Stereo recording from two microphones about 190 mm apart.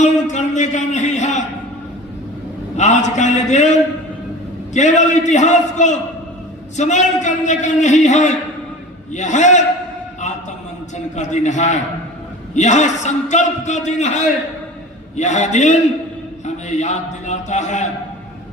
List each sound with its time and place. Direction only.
0.0 s a sound: 40° left (ahead or behind)
2.7 s a man's voice: 40° left (ahead or behind)
10.9 s a man's voice: 40° left (ahead or behind)